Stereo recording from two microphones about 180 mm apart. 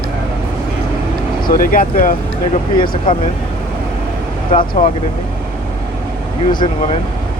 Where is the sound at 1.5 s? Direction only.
50° left (ahead or behind).